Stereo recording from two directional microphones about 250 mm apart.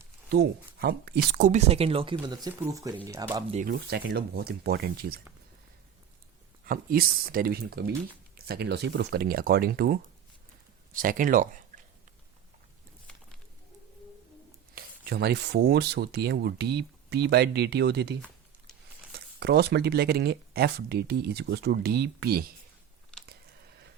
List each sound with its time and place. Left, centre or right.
0.3 s speech: right; by 3.4 s centre
3.5 s speech: right
6.7 s speech: right
14.8 s speech: right